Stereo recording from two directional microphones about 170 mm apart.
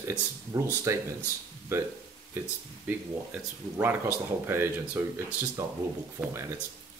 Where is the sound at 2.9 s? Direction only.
10° right (ahead or behind).